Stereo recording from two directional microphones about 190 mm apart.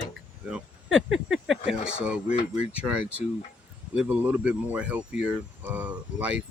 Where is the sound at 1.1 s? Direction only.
90° right.